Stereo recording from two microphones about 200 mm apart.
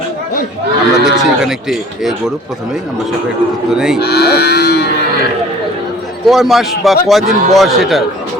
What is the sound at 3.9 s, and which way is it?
Livestock, 55° left (ahead or behind).